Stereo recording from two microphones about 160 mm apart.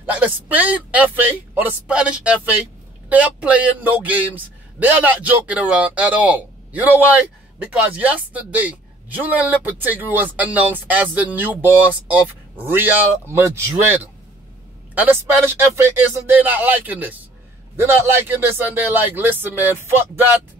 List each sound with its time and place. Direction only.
0.0 s speech: 10° right (ahead or behind)